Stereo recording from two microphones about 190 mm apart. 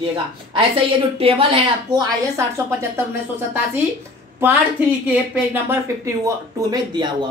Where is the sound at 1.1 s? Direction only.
30° right (ahead or behind).